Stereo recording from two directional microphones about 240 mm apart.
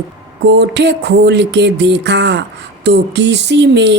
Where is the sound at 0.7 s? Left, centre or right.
Right.